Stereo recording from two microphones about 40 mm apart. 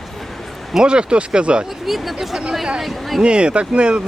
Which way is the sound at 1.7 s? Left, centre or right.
Centre.